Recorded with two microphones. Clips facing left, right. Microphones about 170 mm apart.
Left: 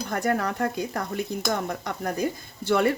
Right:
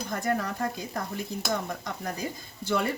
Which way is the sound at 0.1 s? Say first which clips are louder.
Left 4 dB; 65° left (ahead or behind).